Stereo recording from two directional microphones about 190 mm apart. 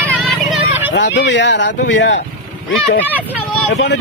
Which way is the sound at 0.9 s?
70° left (ahead or behind).